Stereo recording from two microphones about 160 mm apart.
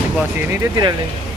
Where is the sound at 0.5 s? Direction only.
25° right (ahead or behind).